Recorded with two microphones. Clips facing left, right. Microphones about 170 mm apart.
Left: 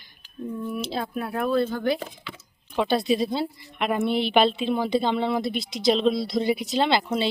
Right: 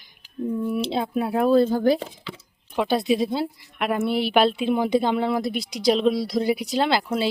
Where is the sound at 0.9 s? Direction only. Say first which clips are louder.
Right 5 dB; 20° right (ahead or behind); by 2.0 s 40° right (ahead or behind).